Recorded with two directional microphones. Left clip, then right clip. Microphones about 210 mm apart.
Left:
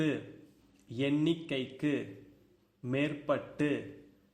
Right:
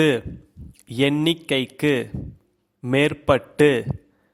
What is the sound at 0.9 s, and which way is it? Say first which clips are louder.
Speech: right 11 dB; 35° right (ahead or behind).